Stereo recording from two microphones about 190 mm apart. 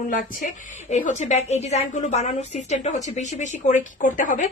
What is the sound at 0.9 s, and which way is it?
A woman's voice, 40° left (ahead or behind).